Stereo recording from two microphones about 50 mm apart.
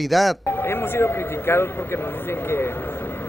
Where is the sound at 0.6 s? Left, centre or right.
Left.